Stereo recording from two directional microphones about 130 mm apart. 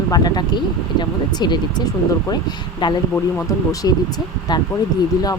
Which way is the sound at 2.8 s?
35° left (ahead or behind).